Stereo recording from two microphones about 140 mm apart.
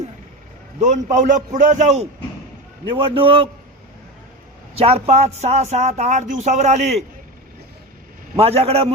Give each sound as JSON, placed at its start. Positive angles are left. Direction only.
{"t": 0.8, "sound": "a man's voice", "side_deg": -55}
{"t": 2.9, "sound": "a man's voice", "side_deg": -40}
{"t": 4.8, "sound": "speech", "side_deg": -45}
{"t": 8.4, "sound": "speech", "side_deg": -45}